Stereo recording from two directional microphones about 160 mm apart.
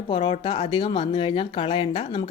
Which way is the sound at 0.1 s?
35° left (ahead or behind).